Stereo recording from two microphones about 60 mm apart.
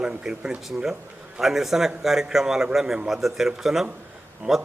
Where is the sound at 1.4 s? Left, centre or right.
Centre.